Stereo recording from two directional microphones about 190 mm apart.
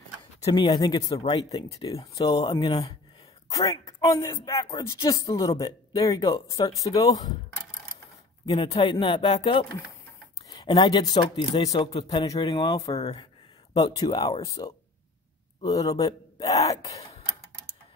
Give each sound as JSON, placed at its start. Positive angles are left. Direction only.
{"t": 0.4, "sound": "speech", "side_deg": 20}
{"t": 8.5, "sound": "speech", "side_deg": 25}